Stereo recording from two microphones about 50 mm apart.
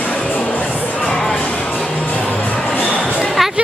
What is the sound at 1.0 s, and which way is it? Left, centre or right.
Music, centre.